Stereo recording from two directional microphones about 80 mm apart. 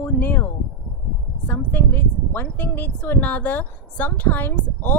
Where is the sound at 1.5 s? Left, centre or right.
Left.